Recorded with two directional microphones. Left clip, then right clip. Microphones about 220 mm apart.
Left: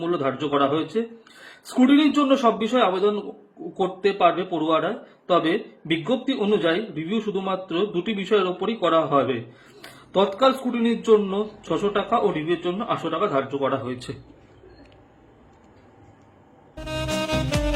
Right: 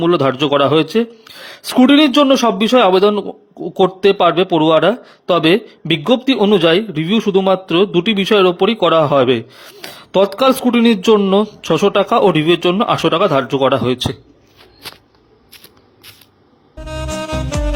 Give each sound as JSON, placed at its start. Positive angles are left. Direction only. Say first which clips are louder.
{"t": 0.0, "sound": "speech", "louder": "right 11 dB", "side_deg": -45}
{"t": 16.7, "sound": "music", "louder": "right 3 dB", "side_deg": 0}